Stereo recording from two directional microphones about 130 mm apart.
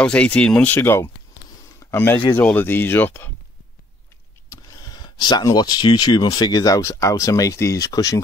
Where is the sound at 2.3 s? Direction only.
10° left (ahead or behind).